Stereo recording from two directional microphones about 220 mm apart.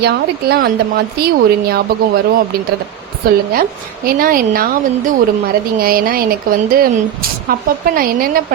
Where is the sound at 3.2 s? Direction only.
45° right (ahead or behind).